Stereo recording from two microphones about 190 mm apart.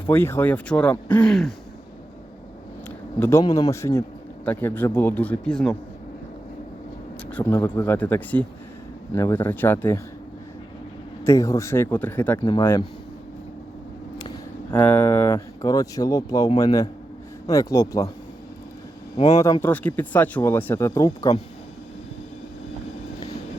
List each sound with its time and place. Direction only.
0.1 s speech: 10° left (ahead or behind)
3.2 s speech: 15° left (ahead or behind)
7.3 s speech: 10° left (ahead or behind)
11.2 s speech: 15° left (ahead or behind)
12.4 s speech: 25° left (ahead or behind)
14.8 s speech: 10° left (ahead or behind)
19.1 s speech: 35° left (ahead or behind)
19.6 s speech: 10° left (ahead or behind)